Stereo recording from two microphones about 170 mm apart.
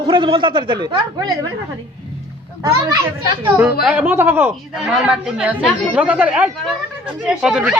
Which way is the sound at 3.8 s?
5° right (ahead or behind).